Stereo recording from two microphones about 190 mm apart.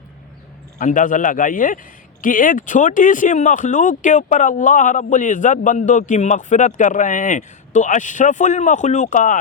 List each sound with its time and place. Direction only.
0.8 s a man's voice: 45° left (ahead or behind)